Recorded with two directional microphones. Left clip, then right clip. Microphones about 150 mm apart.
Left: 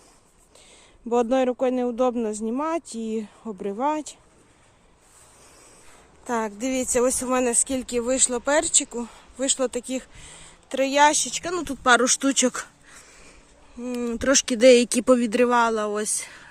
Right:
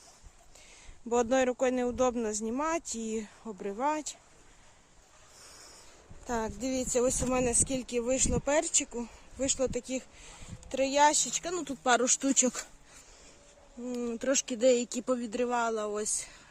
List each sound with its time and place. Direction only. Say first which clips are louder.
1.1 s speech: left 6 dB; 15° left (ahead or behind)
6.2 s speech: left 7 dB; centre (ahead or behind)
13.8 s speech: left 7 dB; 5° left (ahead or behind)
14.2 s speech: left 10 dB; 20° left (ahead or behind)